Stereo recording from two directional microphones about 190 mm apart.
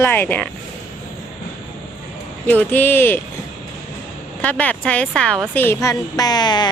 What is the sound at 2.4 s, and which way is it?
Speech, 10° left (ahead or behind).